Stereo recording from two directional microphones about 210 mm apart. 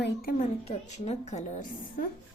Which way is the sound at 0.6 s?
30° left (ahead or behind).